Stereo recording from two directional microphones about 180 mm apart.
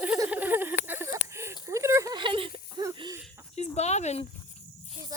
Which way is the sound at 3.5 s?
35° left (ahead or behind).